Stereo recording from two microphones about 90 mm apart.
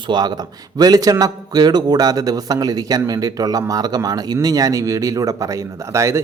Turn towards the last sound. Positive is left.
turn(degrees=-30)  # may be behind; listen again after turning